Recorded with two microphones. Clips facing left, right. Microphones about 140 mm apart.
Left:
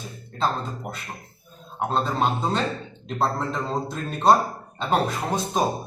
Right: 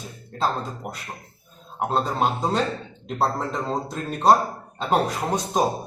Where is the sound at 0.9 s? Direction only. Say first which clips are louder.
Even; 10° right (ahead or behind).